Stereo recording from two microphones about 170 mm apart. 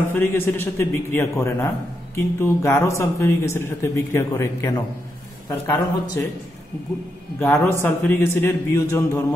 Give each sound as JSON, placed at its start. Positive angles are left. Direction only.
{"t": 0.1, "sound": "a man's voice", "side_deg": 15}
{"t": 7.3, "sound": "a man's voice", "side_deg": 10}